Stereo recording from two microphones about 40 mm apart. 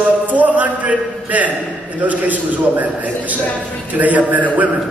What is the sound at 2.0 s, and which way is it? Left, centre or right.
A man's voice, right.